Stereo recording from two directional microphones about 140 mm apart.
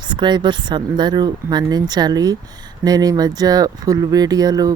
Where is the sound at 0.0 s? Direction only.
35° right (ahead or behind).